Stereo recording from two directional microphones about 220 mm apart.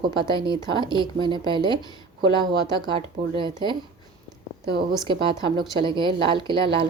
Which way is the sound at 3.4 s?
20° right (ahead or behind).